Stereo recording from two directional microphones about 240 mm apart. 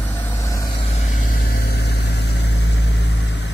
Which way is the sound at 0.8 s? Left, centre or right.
Left.